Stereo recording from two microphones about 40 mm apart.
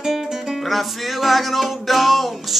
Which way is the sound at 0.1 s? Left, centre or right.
Centre.